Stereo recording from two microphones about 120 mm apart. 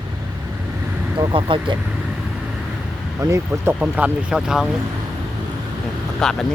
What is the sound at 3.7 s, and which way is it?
Speech, 10° right (ahead or behind).